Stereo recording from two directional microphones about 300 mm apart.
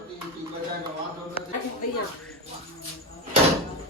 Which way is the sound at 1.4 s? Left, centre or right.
Centre.